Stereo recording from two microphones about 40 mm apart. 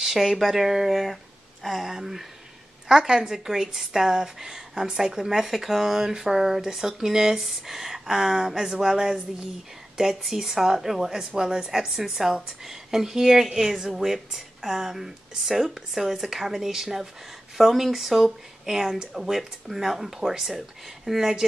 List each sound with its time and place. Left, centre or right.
0.0 s speech: centre
1.9 s a woman's voice: centre